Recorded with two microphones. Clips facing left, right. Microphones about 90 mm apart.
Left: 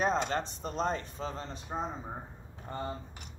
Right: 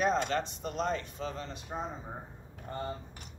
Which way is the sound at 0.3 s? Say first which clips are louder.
Right 1 dB; 35° left (ahead or behind).